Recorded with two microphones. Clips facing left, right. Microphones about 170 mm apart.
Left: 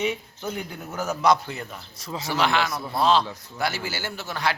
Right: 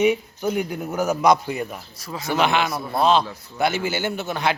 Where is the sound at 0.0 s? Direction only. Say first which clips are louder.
Right 8 dB; 15° right (ahead or behind).